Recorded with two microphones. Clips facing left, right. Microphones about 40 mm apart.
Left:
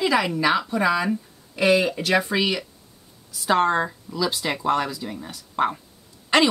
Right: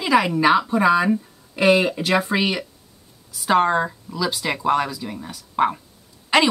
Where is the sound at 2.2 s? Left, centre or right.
Centre.